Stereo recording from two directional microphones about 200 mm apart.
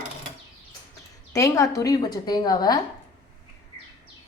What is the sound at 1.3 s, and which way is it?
A woman's voice, 15° left (ahead or behind).